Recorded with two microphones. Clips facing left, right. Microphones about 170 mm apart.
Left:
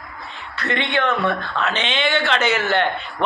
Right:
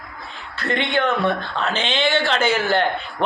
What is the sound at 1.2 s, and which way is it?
A man's voice, 30° right (ahead or behind).